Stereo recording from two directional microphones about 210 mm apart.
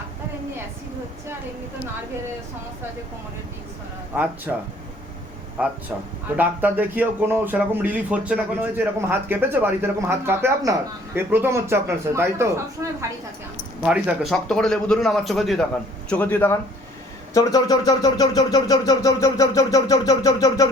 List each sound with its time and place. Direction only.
4.5 s speech: 5° right (ahead or behind)
12.8 s a sound: 15° right (ahead or behind)
13.8 s speech: 5° right (ahead or behind); by 20.7 s 15° left (ahead or behind)